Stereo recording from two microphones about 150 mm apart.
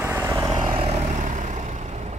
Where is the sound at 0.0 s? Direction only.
20° right (ahead or behind).